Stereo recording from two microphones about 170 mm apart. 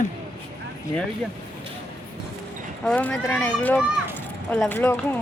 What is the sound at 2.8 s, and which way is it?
Speech, 5° left (ahead or behind).